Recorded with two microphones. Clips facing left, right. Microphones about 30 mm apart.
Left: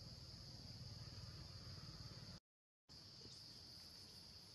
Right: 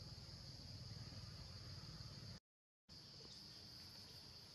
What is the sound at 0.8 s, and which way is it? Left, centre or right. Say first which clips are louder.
Vehicle: right 1 dB; centre.